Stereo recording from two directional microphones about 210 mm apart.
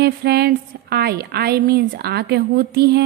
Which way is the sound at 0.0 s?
50° right (ahead or behind).